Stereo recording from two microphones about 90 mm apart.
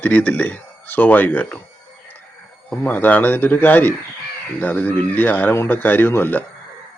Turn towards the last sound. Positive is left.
turn(degrees=25)  # may be behind; listen again after turning